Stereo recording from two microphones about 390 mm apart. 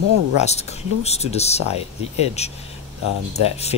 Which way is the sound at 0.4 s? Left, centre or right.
Centre.